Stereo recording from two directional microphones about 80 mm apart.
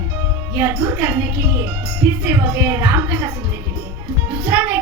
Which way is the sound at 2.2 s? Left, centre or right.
Right.